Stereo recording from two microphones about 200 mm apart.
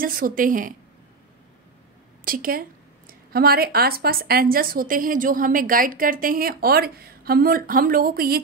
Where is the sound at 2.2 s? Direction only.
45° right (ahead or behind).